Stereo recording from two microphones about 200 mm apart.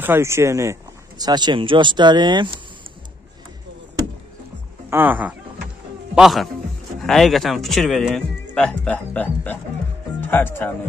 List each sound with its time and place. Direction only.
0.0 s speech: 10° right (ahead or behind)
4.8 s speech: 10° right (ahead or behind); by 10.7 s 10° left (ahead or behind)